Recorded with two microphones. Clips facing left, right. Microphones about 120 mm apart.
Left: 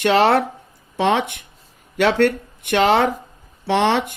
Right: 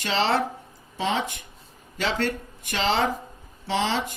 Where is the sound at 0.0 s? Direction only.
65° left (ahead or behind).